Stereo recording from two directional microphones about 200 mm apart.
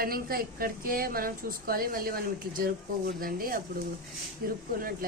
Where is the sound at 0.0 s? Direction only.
45° right (ahead or behind).